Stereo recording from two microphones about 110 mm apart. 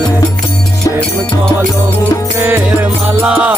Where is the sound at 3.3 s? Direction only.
10° right (ahead or behind).